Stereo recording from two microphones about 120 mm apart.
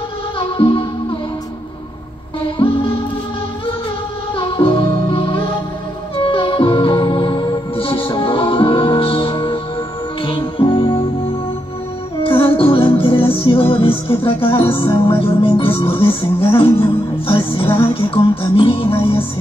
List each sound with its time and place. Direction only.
0.4 s music: 50° left (ahead or behind)
2.6 s music: 50° left (ahead or behind)
4.4 s music: 50° left (ahead or behind)
12.2 s music: 50° left (ahead or behind)